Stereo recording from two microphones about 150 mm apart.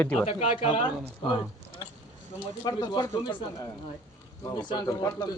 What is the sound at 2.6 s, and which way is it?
Speech, 25° left (ahead or behind).